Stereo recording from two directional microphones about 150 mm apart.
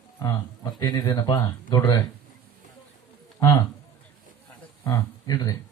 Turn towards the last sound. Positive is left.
turn(degrees=25)  # may be behind; listen again after turning